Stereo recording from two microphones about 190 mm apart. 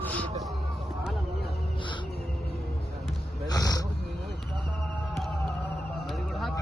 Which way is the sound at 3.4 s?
20° left (ahead or behind).